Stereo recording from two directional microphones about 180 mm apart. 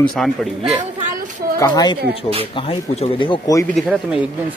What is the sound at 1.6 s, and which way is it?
Speech, 20° left (ahead or behind).